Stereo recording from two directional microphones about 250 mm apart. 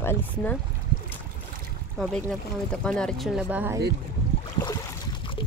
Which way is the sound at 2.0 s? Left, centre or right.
Centre.